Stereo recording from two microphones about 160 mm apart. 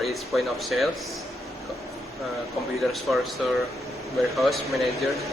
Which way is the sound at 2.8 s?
Centre (ahead or behind).